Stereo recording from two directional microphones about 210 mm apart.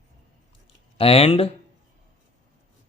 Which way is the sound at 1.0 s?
30° left (ahead or behind).